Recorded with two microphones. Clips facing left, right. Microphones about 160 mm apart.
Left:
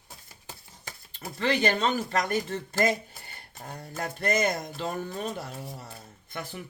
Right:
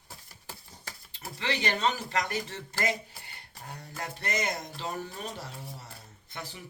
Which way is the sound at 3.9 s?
50° left (ahead or behind).